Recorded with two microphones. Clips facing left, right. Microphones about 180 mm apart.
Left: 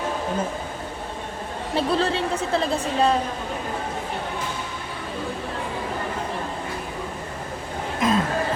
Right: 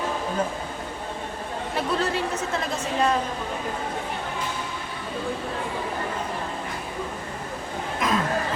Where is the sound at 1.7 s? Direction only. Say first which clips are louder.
Left 4 dB; 30° left (ahead or behind).